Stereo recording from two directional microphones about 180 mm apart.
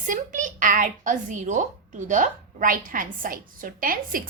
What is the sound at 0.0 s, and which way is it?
A woman's voice, 45° right (ahead or behind).